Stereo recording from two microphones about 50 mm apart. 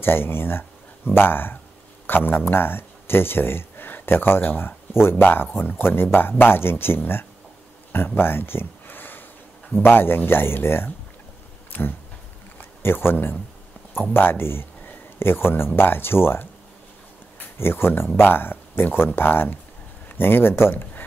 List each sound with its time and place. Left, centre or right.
0.0 s speech: left
7.9 s a sound: left
9.8 s speech: left
11.7 s speech: left